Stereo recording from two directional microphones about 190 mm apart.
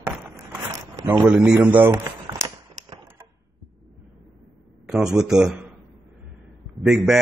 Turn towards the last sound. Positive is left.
turn(degrees=0)  # may be behind; listen again after turning